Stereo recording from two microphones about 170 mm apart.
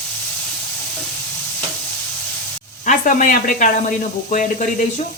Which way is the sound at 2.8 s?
50° left (ahead or behind).